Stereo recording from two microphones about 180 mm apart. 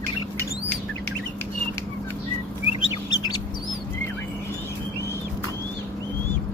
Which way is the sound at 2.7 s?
30° left (ahead or behind).